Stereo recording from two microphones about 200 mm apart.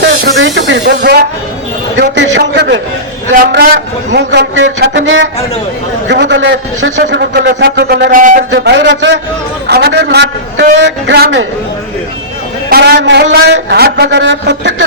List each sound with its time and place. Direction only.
0.3 s a man's voice: 65° right (ahead or behind)
4.1 s a man's voice: 60° right (ahead or behind); by 8.4 s 40° right (ahead or behind)
8.4 s a man's voice: 60° right (ahead or behind)
9.6 s a sound: 55° right (ahead or behind)
12.7 s a man's voice: 55° right (ahead or behind)